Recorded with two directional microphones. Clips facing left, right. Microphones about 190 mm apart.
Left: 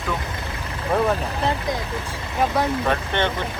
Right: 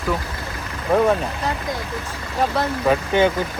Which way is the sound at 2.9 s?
5° right (ahead or behind).